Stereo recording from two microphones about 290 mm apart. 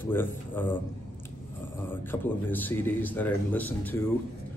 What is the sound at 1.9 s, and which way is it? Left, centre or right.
A man's voice, centre.